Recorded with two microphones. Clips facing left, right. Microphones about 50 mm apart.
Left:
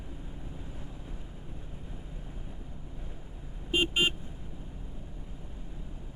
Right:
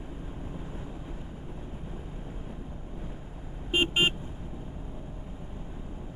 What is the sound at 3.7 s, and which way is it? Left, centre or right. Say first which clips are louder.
Vehicle: right 2 dB; right.